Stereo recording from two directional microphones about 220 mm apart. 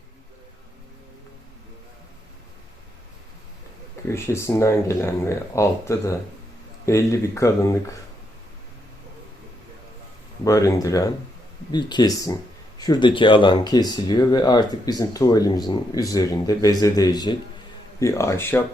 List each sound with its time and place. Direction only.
4.1 s speech: 10° left (ahead or behind)
10.4 s speech: 15° left (ahead or behind)